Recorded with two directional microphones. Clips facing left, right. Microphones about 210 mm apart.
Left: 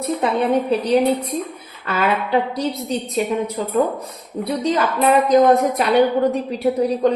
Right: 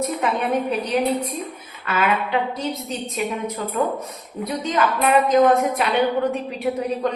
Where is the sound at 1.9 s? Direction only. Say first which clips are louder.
Left 2 dB; 40° left (ahead or behind).